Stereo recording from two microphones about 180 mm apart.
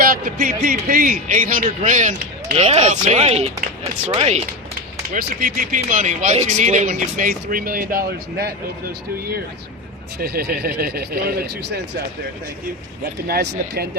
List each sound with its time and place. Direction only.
0.0 s speech: 50° right (ahead or behind); by 4.4 s 35° right (ahead or behind)
5.1 s speech: 50° right (ahead or behind)
10.2 s speech: 60° right (ahead or behind)
13.2 s speech: 60° right (ahead or behind)